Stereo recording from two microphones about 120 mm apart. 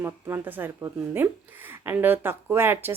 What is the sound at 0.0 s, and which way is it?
A woman's voice, 20° right (ahead or behind).